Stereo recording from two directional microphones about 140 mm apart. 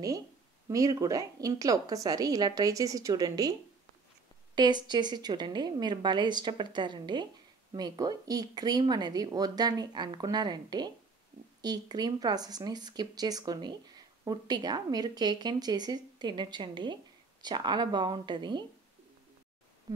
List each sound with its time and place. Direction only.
0.7 s speech: 25° right (ahead or behind)
4.6 s a woman's voice: 30° right (ahead or behind)